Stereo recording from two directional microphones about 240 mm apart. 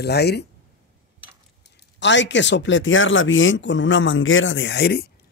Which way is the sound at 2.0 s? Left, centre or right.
Left.